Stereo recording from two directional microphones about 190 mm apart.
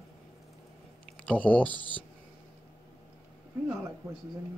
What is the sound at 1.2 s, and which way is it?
Speech, 5° left (ahead or behind).